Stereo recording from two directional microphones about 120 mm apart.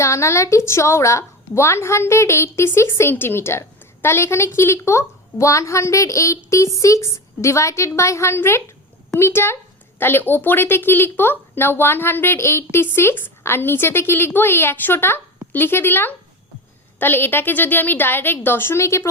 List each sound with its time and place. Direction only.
0.0 s a woman's voice: 25° left (ahead or behind)